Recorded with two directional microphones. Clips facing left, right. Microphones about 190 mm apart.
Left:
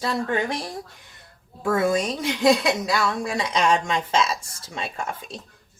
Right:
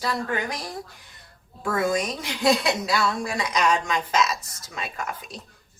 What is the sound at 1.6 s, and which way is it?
A woman's voice, 25° left (ahead or behind).